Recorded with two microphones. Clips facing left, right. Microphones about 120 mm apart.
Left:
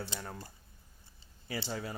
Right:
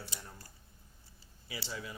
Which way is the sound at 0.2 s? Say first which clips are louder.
Left 8 dB; 65° left (ahead or behind).